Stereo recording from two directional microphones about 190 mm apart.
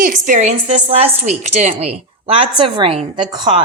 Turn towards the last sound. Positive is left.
turn(degrees=-25)  # may be behind; listen again after turning